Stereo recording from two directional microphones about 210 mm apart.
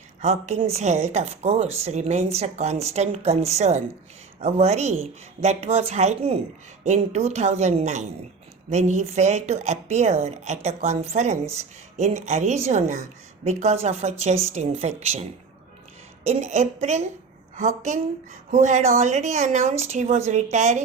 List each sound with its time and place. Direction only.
0.2 s speech: 30° right (ahead or behind)